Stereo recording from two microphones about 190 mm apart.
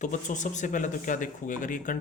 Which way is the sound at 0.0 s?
40° left (ahead or behind).